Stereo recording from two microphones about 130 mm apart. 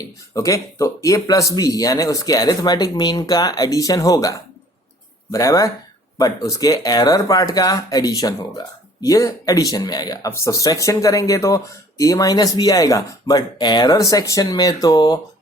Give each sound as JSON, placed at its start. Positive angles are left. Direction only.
{"t": 0.3, "sound": "speech", "side_deg": 25}